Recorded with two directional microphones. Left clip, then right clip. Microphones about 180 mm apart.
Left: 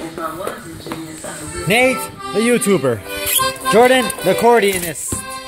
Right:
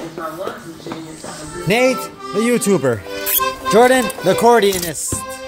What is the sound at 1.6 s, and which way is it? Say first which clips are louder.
Speech: left 1 dB; centre (ahead or behind).